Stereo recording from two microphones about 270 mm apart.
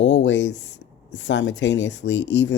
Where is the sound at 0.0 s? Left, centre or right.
Left.